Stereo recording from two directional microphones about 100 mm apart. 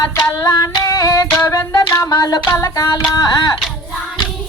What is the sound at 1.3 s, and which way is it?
Music, 25° left (ahead or behind).